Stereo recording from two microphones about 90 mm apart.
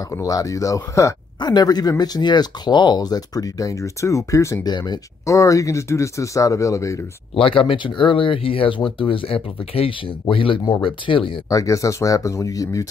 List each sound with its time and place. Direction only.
0.1 s speech: 40° left (ahead or behind)
1.4 s speech: 50° left (ahead or behind)
4.6 s speech: 50° left (ahead or behind)
5.2 s speech: 35° left (ahead or behind)
7.3 s speech: 80° left
10.2 s speech: 75° left (ahead or behind)
11.4 s speech: 35° left (ahead or behind)